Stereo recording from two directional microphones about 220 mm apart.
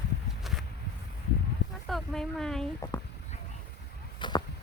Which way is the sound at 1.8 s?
Centre (ahead or behind).